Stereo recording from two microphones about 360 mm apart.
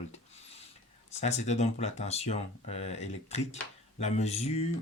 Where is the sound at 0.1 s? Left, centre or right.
Centre.